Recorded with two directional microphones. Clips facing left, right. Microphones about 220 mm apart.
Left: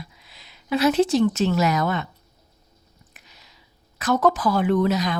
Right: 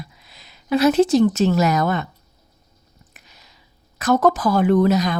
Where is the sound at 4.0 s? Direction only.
45° right (ahead or behind).